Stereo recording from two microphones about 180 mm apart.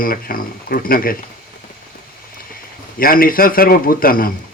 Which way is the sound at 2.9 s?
55° left (ahead or behind).